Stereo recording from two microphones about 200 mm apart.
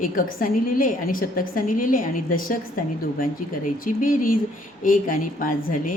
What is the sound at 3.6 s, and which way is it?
A woman's voice, 40° left (ahead or behind).